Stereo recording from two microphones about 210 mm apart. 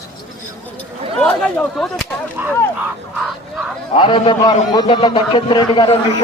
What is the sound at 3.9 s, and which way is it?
A man's voice, 25° left (ahead or behind).